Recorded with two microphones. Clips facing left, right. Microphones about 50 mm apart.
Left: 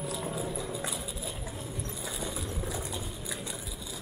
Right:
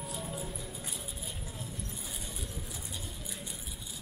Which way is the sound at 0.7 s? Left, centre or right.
Left.